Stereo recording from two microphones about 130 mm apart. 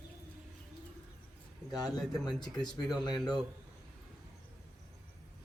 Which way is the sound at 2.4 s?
35° left (ahead or behind).